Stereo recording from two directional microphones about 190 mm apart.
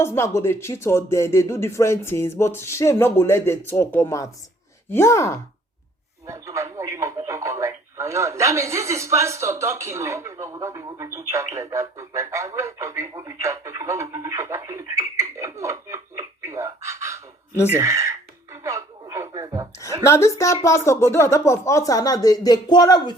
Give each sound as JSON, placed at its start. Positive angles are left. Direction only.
{"t": 0.0, "sound": "speech", "side_deg": 15}
{"t": 6.2, "sound": "speech", "side_deg": -15}
{"t": 17.7, "sound": "a sound", "side_deg": -15}
{"t": 20.1, "sound": "speech", "side_deg": 15}